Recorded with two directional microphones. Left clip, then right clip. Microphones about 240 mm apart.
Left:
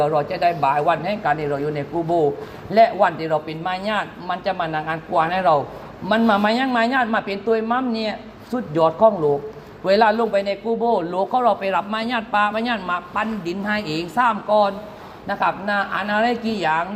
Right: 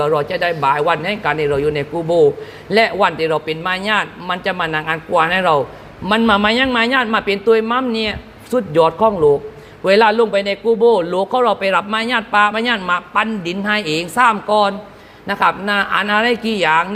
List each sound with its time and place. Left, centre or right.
0.0 s speech: right